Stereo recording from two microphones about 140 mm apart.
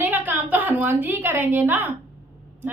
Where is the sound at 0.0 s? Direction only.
15° right (ahead or behind).